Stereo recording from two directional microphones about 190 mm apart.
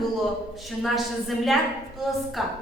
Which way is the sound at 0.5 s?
Centre (ahead or behind).